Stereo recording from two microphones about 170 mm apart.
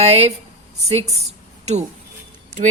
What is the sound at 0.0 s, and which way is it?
Speech, 40° right (ahead or behind).